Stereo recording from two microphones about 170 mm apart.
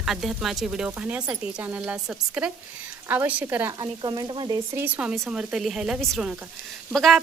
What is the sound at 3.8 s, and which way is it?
A woman's voice, 25° right (ahead or behind).